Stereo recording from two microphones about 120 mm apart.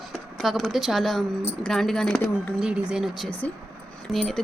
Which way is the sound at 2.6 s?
10° right (ahead or behind).